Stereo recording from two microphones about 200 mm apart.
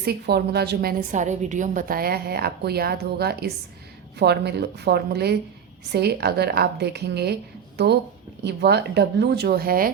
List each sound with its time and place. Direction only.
0.0 s a woman's voice: 55° right (ahead or behind)